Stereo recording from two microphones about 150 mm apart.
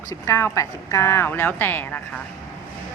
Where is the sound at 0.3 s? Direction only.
20° left (ahead or behind).